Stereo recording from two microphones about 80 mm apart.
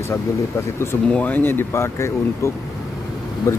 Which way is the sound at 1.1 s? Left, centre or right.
Left.